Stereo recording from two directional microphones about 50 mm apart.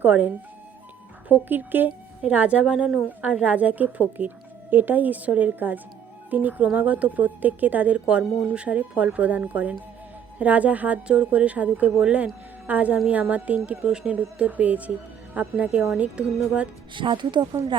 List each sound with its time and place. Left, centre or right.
0.0 s speech: right
1.3 s speech: right
2.2 s a woman's voice: right
7.9 s a woman's voice: right
14.1 s a woman's voice: right